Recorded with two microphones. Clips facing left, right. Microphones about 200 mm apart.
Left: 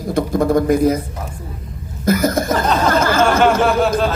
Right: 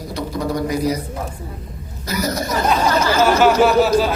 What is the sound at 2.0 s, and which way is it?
Speech, 50° left (ahead or behind).